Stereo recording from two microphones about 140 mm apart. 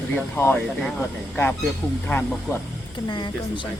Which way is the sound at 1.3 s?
15° left (ahead or behind).